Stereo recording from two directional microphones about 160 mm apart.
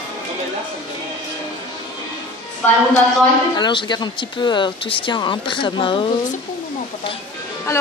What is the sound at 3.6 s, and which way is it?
Speech, 30° left (ahead or behind).